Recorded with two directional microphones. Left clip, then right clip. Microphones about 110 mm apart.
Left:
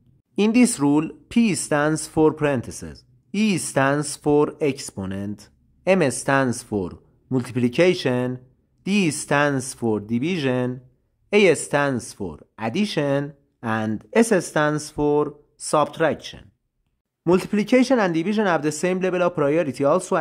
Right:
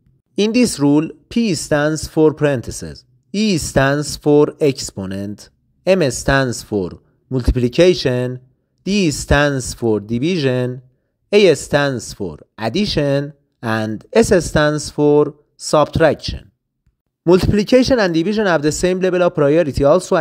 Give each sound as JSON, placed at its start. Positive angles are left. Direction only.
{"t": 0.4, "sound": "speech", "side_deg": -30}